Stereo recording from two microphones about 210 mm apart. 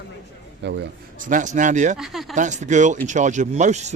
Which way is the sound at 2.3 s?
35° right (ahead or behind).